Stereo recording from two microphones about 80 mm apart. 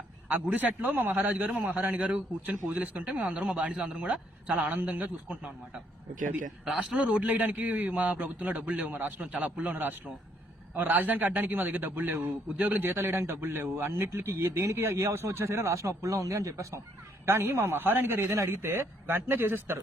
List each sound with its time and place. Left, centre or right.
0.3 s a man's voice: right
6.7 s a man's voice: centre